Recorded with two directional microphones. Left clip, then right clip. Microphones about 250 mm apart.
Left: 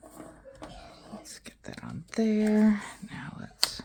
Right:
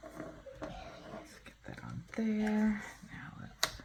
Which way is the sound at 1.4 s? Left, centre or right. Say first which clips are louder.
Left 5 dB; left.